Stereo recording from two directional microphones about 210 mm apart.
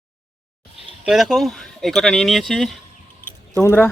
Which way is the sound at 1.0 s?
Centre (ahead or behind).